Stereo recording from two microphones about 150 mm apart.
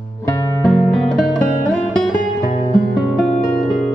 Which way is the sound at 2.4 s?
50° left (ahead or behind).